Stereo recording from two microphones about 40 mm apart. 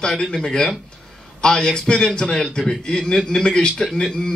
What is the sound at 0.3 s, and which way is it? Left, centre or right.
A man's voice, centre.